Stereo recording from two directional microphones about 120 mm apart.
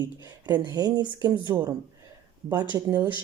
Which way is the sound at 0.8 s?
30° right (ahead or behind).